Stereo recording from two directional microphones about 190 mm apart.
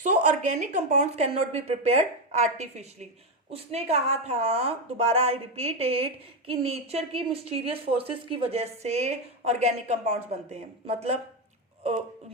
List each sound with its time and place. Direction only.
0.0 s a woman's voice: 40° right (ahead or behind)